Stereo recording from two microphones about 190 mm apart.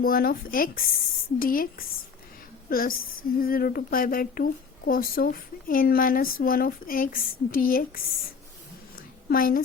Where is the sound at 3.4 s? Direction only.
50° left (ahead or behind).